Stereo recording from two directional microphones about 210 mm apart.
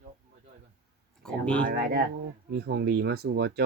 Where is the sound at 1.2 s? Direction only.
5° left (ahead or behind).